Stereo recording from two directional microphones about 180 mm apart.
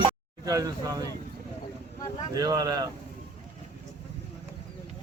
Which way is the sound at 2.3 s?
20° right (ahead or behind).